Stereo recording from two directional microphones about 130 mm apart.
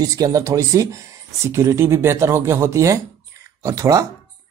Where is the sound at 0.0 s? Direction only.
25° right (ahead or behind).